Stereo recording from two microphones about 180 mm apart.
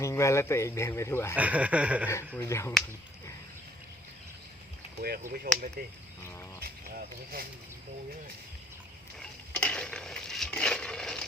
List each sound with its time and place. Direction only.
0.0 s speech: 15° left (ahead or behind)
1.4 s speech: 10° right (ahead or behind)
2.4 s speech: 15° left (ahead or behind)
4.9 s speech: 55° right (ahead or behind)
9.6 s a sound: 5° left (ahead or behind)